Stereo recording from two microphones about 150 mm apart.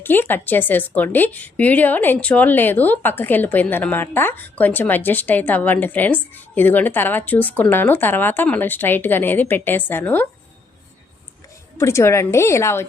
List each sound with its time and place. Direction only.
0.0 s a woman's voice: 15° left (ahead or behind)
11.8 s a woman's voice: 20° left (ahead or behind)